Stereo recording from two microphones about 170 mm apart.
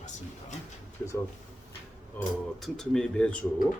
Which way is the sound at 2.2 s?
10° left (ahead or behind).